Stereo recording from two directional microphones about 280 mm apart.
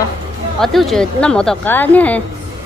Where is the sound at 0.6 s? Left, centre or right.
Centre.